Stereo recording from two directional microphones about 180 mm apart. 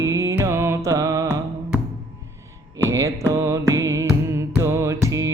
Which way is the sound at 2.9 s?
15° right (ahead or behind).